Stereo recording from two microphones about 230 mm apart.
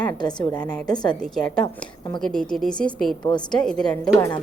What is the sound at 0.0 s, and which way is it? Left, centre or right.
Speech, centre.